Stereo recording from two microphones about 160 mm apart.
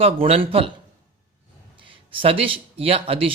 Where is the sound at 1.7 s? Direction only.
35° right (ahead or behind).